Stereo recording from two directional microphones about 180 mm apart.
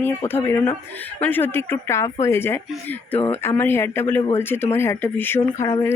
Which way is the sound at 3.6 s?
15° left (ahead or behind).